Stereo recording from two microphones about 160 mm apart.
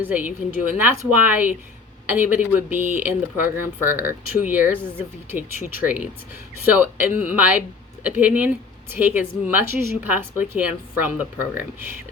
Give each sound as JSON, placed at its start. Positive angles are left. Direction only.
{"t": 0.0, "sound": "a woman's voice", "side_deg": -10}